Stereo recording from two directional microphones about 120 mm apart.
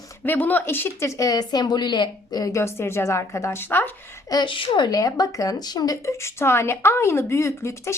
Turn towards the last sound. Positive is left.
turn(degrees=25)  # may be behind; listen again after turning